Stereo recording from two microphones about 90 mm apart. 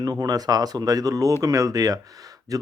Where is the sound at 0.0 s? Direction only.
45° right (ahead or behind).